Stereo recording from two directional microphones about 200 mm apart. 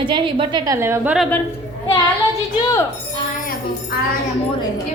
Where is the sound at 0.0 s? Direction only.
25° right (ahead or behind); by 1.3 s 5° right (ahead or behind).